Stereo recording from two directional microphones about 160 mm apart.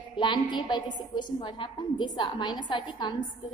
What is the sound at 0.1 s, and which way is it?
A woman's voice, 30° left (ahead or behind).